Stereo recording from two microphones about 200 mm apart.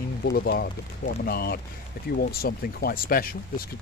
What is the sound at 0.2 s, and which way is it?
Speech, 50° left (ahead or behind).